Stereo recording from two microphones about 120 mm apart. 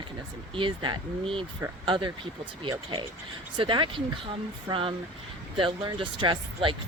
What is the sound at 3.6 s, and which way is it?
Speech, 45° right (ahead or behind).